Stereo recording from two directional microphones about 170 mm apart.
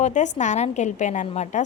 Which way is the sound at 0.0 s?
45° left (ahead or behind).